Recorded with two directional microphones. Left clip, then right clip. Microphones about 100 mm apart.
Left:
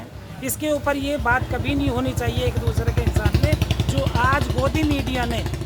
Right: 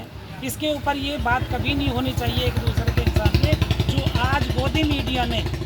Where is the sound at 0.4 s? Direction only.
45° left (ahead or behind).